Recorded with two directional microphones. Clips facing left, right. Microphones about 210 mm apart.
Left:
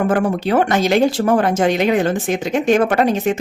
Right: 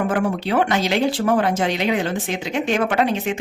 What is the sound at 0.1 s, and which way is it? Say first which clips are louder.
Speech: left 4 dB; 45° left (ahead or behind).